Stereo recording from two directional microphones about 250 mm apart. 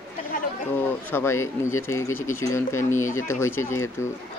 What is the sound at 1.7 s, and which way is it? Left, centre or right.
Speech, left.